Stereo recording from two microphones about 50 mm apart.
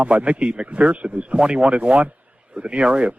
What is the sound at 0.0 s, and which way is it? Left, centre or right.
A man's voice, right.